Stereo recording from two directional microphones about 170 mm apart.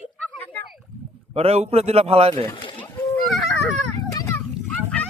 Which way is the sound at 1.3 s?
35° right (ahead or behind).